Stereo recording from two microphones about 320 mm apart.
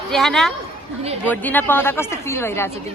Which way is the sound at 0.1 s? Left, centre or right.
Centre.